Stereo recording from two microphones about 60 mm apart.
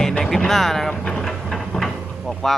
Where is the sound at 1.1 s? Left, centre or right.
Centre.